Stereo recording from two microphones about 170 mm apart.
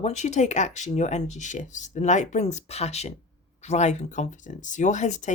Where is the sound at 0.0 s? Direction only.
45° left (ahead or behind).